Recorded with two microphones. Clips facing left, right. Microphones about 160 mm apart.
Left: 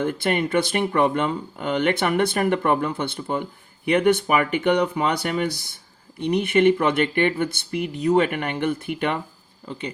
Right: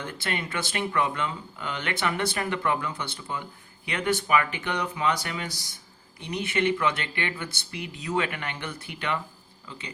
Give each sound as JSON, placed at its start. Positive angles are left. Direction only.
{"t": 0.0, "sound": "speech", "side_deg": 55}